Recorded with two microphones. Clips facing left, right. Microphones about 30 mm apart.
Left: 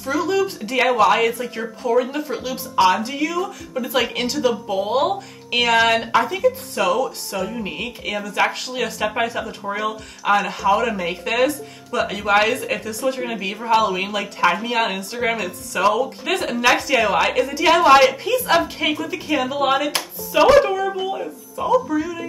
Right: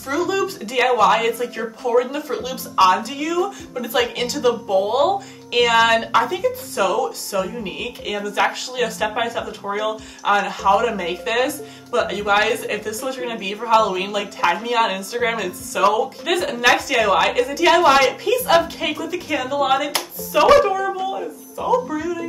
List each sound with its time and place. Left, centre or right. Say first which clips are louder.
0.0 s a sound: left 1 dB; centre
0.7 s a woman's voice: right 1 dB; centre
3.0 s a woman's voice: left 1 dB; centre
3.3 s speech: right 2 dB; centre
4.4 s a woman's voice: right 4 dB; centre
20.6 s a woman's voice: right 1 dB; centre
20.9 s a woman's voice: even; centre